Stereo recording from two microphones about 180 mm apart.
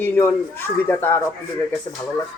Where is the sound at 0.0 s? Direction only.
10° left (ahead or behind).